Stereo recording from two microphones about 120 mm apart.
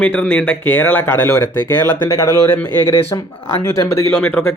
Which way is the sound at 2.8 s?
50° left (ahead or behind).